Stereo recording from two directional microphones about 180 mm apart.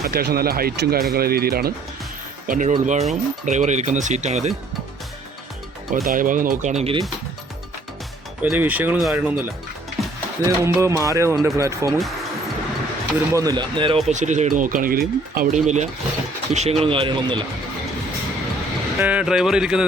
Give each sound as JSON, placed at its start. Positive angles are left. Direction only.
{"t": 0.0, "sound": "speech", "side_deg": -60}
{"t": 6.1, "sound": "speech", "side_deg": -50}
{"t": 8.4, "sound": "speech", "side_deg": -10}
{"t": 10.0, "sound": "music", "side_deg": 0}
{"t": 10.4, "sound": "speech", "side_deg": -15}
{"t": 13.1, "sound": "speech", "side_deg": -20}
{"t": 14.1, "sound": "speech", "side_deg": -40}
{"t": 18.9, "sound": "speech", "side_deg": -10}